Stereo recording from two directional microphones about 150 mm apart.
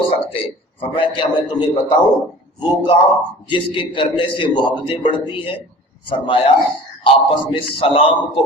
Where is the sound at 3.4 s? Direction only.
35° left (ahead or behind).